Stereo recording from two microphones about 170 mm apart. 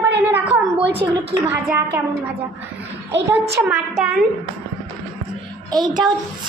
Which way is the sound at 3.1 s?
90° right.